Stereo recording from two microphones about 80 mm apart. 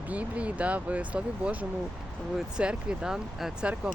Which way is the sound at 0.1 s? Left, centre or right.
Centre.